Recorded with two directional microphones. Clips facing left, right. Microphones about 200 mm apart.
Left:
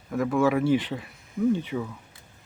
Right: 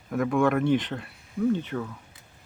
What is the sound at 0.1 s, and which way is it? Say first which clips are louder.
Speech: even; centre (ahead or behind).